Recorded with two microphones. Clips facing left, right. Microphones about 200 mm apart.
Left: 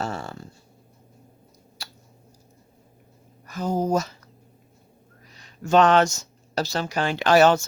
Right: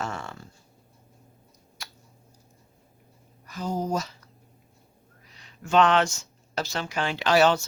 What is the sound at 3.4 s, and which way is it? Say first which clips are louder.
Speech: left 5 dB; 50° left (ahead or behind).